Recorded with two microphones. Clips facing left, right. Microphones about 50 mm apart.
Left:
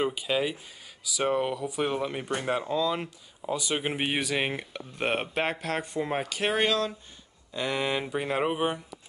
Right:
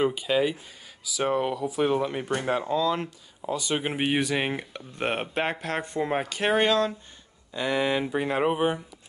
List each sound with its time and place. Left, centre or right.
0.0 s speech: centre